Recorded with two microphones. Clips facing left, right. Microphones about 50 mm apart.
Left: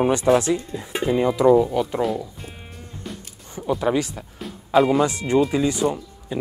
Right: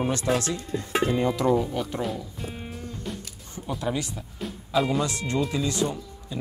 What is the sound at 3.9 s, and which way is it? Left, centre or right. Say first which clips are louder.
Speech: left 7 dB; left.